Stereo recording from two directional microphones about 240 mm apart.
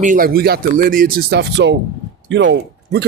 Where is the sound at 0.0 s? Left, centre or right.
Right.